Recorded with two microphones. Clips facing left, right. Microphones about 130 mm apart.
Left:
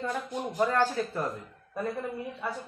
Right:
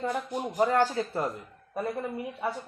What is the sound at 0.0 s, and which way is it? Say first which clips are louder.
Speech: right 2 dB; 15° right (ahead or behind).